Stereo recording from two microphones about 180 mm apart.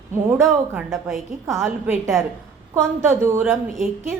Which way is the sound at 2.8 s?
15° right (ahead or behind).